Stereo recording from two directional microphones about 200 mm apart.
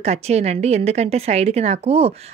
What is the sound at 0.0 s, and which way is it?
A woman's voice, 35° right (ahead or behind).